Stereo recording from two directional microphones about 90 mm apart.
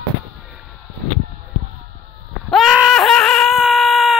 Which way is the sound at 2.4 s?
Centre (ahead or behind).